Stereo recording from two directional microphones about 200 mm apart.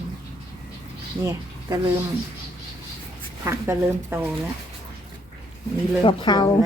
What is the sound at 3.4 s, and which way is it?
Speech, 15° right (ahead or behind).